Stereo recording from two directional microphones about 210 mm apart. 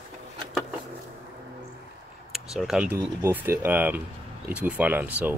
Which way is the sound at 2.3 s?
Centre (ahead or behind).